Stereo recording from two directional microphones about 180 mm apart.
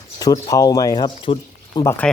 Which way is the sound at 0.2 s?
20° left (ahead or behind).